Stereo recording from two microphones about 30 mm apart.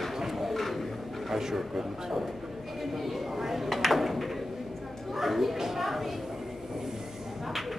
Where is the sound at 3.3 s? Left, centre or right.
Centre.